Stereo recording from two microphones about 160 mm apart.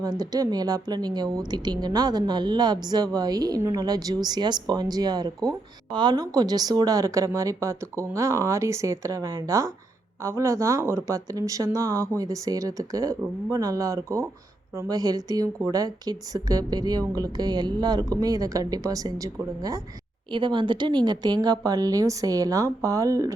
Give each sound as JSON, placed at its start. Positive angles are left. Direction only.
{"t": 0.0, "sound": "a woman's voice", "side_deg": -25}